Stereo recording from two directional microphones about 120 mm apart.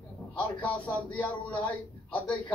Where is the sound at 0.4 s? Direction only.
15° left (ahead or behind).